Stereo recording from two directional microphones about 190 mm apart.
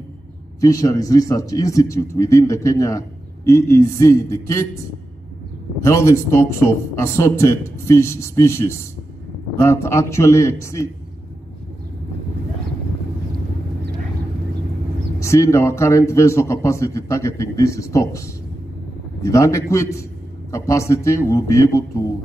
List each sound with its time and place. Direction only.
0.6 s a man's voice: 15° left (ahead or behind)
5.8 s a man's voice: 15° left (ahead or behind)
15.1 s a man's voice: 15° left (ahead or behind)